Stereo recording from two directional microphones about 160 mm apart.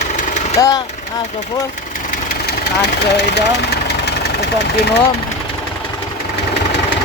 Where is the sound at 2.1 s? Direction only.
65° left (ahead or behind); by 5.0 s 90° left.